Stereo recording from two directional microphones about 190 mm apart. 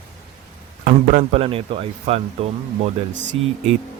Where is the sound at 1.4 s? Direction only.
30° right (ahead or behind).